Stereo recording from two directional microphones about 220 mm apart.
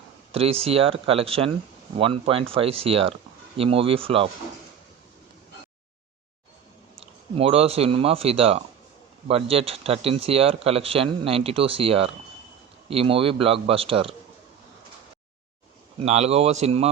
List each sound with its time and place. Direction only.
0.3 s speech: 25° right (ahead or behind)
6.9 s speech: 25° right (ahead or behind)
16.0 s speech: 30° right (ahead or behind)